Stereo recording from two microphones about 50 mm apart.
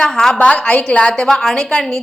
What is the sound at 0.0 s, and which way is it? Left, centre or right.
Speech, centre.